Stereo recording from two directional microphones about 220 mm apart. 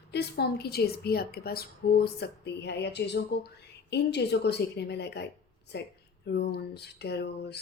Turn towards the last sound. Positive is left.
turn(degrees=50)  # may be behind; listen again after turning